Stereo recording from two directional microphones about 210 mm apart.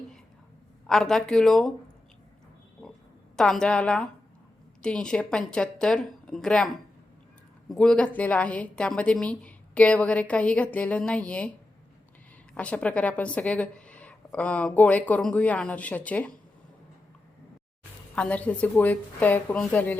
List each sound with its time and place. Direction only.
0.9 s a woman's voice: centre (ahead or behind)
3.3 s a woman's voice: 5° left (ahead or behind)
7.7 s a woman's voice: 5° left (ahead or behind)
12.5 s a woman's voice: 5° left (ahead or behind)
18.1 s a woman's voice: 5° left (ahead or behind)